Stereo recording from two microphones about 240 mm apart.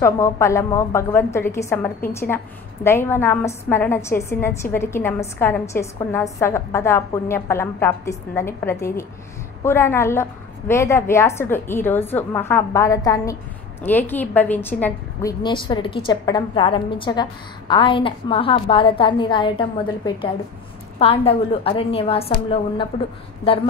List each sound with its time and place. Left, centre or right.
0.0 s a woman's voice: centre
15.4 s a woman's voice: centre
23.4 s a woman's voice: left